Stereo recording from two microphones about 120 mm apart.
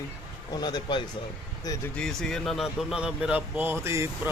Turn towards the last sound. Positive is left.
turn(degrees=-25)  # may be behind; listen again after turning